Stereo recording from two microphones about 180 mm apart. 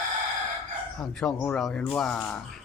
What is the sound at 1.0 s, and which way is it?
Speech, 5° left (ahead or behind).